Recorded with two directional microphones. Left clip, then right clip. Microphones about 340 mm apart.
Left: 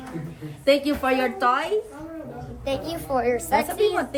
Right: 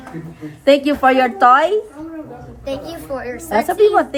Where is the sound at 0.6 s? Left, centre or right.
Centre.